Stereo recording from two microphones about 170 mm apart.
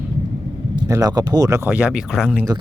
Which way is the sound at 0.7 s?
20° right (ahead or behind).